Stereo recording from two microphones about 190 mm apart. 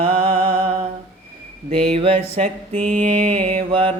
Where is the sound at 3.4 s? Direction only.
30° right (ahead or behind).